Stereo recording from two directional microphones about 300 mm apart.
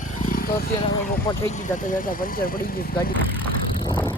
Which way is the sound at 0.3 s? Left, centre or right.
Left.